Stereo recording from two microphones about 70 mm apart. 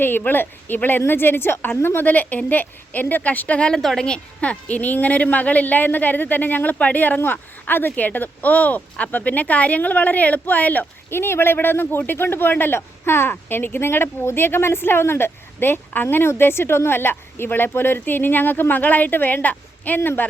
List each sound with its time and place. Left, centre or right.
0.0 s a woman's voice: left
3.8 s a woman's voice: centre; by 10.8 s left
11.1 s a woman's voice: left